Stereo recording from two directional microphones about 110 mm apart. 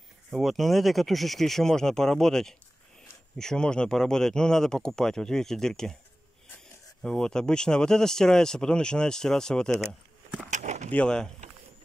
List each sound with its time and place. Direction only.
0.3 s speech: centre (ahead or behind)
7.0 s speech: 5° left (ahead or behind)
10.5 s a sound: 90° right
10.9 s speech: 10° left (ahead or behind)